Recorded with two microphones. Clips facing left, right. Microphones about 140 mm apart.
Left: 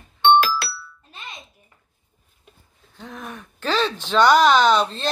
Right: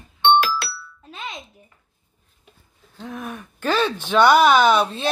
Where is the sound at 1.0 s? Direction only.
90° right.